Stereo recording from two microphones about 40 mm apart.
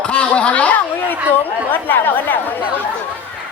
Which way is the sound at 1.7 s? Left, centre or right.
Left.